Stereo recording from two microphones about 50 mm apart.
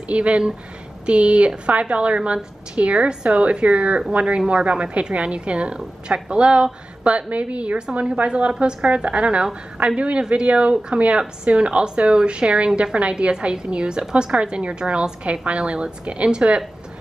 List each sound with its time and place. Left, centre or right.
0.1 s speech: right